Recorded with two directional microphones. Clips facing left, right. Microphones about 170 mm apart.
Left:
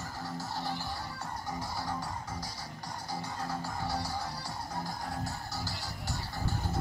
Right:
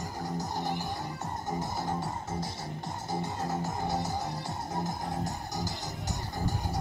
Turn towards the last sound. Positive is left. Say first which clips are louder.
# right 3 dB
turn(degrees=-15)  # may be behind; listen again after turning